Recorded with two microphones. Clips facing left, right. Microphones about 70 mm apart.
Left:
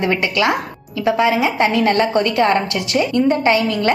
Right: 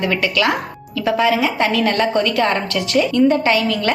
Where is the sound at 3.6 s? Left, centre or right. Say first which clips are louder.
Left 1 dB; left.